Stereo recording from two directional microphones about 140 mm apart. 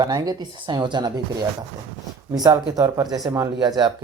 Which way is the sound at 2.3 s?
30° right (ahead or behind).